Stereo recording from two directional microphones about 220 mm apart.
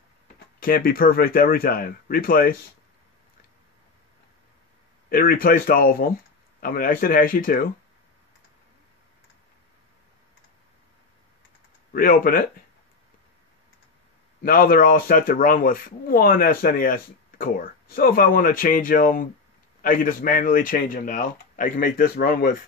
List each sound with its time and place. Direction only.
0.6 s speech: 40° left (ahead or behind)
5.1 s speech: 40° left (ahead or behind)
11.9 s speech: 40° left (ahead or behind)
14.4 s speech: 40° left (ahead or behind)